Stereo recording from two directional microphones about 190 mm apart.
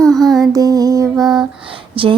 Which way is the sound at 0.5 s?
20° right (ahead or behind).